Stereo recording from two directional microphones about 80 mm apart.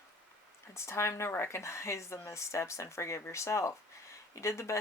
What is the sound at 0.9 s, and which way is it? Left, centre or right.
Speech, left.